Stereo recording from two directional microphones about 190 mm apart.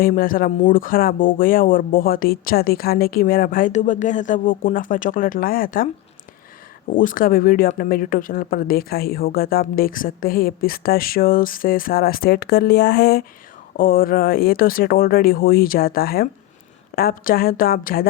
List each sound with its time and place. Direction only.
0.0 s speech: 50° left (ahead or behind)
6.9 s speech: 45° left (ahead or behind)